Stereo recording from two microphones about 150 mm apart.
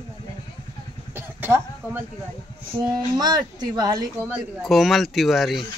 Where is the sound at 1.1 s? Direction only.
15° right (ahead or behind).